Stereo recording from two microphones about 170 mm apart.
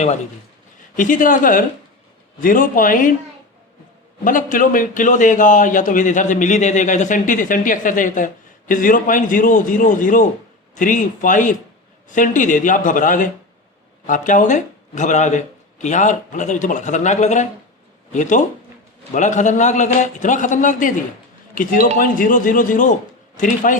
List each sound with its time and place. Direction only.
0.9 s a man's voice: 50° left (ahead or behind)
4.2 s a man's voice: 50° left (ahead or behind)